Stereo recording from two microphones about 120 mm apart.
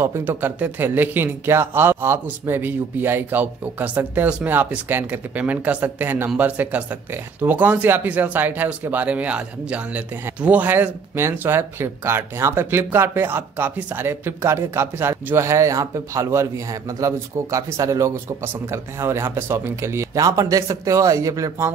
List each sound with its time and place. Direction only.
0.0 s speech: 20° right (ahead or behind)